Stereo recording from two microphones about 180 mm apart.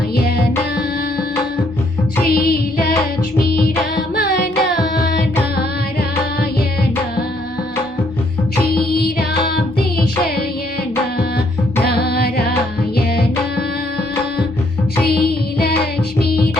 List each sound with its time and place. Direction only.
2.2 s music: 55° left (ahead or behind)
3.3 s carnatic music: 60° left (ahead or behind)
8.7 s music: 60° left (ahead or behind)
11.9 s music: 60° left (ahead or behind)
15.0 s music: 60° left (ahead or behind)